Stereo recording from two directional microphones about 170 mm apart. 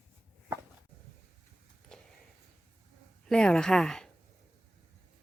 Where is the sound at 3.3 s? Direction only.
5° left (ahead or behind).